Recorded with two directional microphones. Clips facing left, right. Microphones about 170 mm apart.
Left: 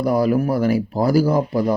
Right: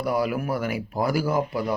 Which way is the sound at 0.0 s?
35° left (ahead or behind).